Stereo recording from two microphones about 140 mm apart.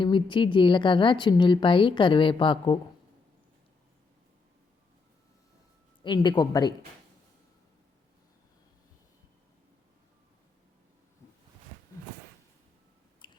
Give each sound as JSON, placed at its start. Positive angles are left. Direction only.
{"t": 0.0, "sound": "a woman's voice", "side_deg": 35}
{"t": 6.0, "sound": "a woman's voice", "side_deg": 35}
{"t": 13.2, "sound": "chewing", "side_deg": 35}